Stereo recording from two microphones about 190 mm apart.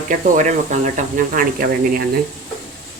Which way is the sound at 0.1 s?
40° right (ahead or behind).